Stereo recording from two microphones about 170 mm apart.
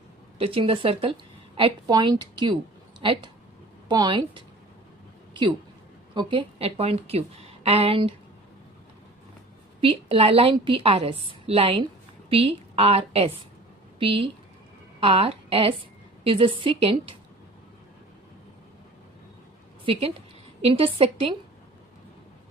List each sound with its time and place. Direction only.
0.3 s a woman's voice: 35° right (ahead or behind)
9.8 s a woman's voice: 35° right (ahead or behind)
19.8 s a woman's voice: 35° right (ahead or behind)